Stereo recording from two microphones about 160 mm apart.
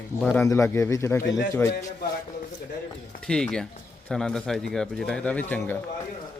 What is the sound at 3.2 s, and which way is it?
Speech, 5° left (ahead or behind).